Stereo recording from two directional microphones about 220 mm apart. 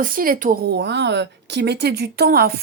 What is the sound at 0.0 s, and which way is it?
Speech, 40° right (ahead or behind).